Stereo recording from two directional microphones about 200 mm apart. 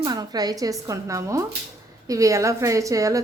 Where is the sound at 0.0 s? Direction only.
20° right (ahead or behind).